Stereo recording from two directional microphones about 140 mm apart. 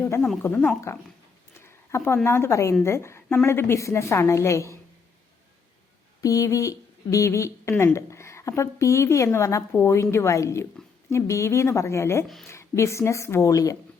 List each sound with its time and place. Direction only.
0.4 s speech: 10° left (ahead or behind)
1.6 s a sound: 20° left (ahead or behind)
2.2 s a woman's voice: 20° left (ahead or behind)
6.2 s a woman's voice: 25° left (ahead or behind)